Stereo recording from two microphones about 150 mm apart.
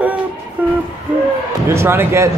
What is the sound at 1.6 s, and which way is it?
Speech, 15° right (ahead or behind).